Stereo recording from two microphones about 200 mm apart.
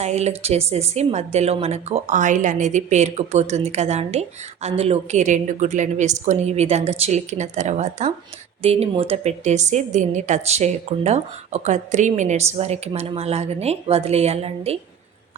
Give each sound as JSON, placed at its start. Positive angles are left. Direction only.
{"t": 0.0, "sound": "a woman's voice", "side_deg": -35}